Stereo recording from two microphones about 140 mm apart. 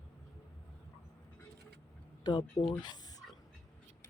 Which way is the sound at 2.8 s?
30° left (ahead or behind).